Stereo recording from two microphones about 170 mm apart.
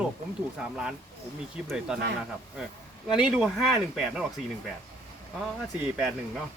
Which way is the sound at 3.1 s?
5° right (ahead or behind).